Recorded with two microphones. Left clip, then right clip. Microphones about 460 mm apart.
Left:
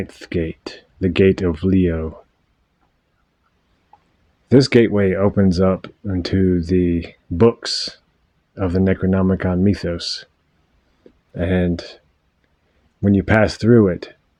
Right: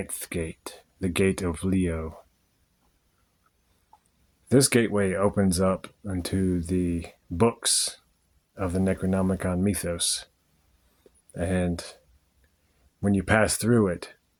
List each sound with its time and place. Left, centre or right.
0.0 s speech: right
4.4 s speech: right
11.3 s speech: right
13.0 s speech: right